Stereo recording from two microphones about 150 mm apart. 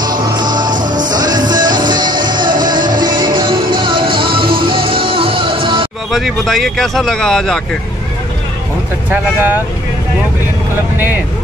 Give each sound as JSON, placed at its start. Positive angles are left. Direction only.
{"t": 0.6, "sound": "music", "side_deg": -60}
{"t": 1.1, "sound": "music", "side_deg": -30}
{"t": 1.6, "sound": "music", "side_deg": -65}
{"t": 2.1, "sound": "music", "side_deg": -30}
{"t": 6.1, "sound": "speech", "side_deg": 0}
{"t": 9.1, "sound": "speech", "side_deg": -10}